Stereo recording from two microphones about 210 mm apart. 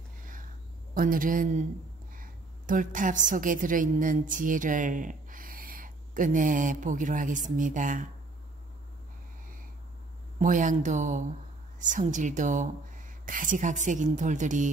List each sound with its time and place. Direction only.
0.2 s a sound: 40° right (ahead or behind)
0.9 s a woman's voice: 40° right (ahead or behind)
10.4 s speech: 35° right (ahead or behind)